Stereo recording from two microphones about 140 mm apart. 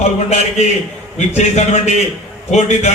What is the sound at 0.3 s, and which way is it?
A man's voice, 55° left (ahead or behind).